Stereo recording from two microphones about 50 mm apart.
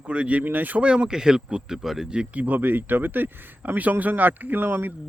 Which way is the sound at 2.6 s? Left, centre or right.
Right.